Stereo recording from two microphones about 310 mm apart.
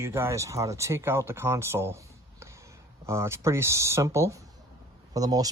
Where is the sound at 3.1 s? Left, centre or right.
Centre.